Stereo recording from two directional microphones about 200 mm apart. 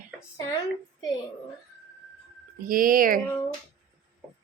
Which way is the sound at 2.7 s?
45° right (ahead or behind).